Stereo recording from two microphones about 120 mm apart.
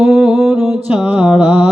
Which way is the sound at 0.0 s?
5° right (ahead or behind).